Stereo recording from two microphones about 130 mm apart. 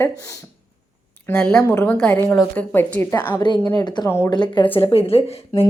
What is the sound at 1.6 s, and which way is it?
Speech, 15° left (ahead or behind).